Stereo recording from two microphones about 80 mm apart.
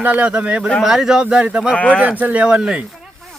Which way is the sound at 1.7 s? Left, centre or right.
Centre.